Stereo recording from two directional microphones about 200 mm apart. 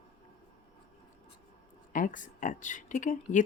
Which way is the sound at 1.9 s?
40° left (ahead or behind).